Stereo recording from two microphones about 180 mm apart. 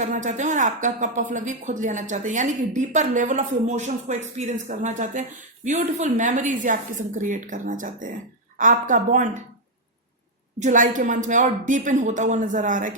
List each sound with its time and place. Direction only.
0.0 s a woman's voice: 45° right (ahead or behind)
10.6 s a woman's voice: 45° right (ahead or behind)